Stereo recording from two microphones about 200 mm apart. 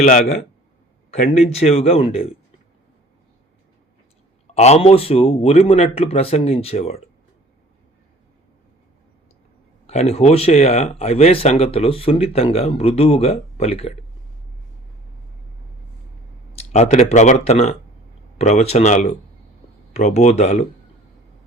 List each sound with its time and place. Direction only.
0.0 s speech: 35° left (ahead or behind)
4.5 s speech: 35° left (ahead or behind)
9.8 s speech: 35° left (ahead or behind)
16.5 s speech: 35° left (ahead or behind)